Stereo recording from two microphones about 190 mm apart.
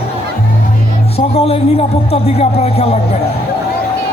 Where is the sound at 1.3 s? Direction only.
30° left (ahead or behind).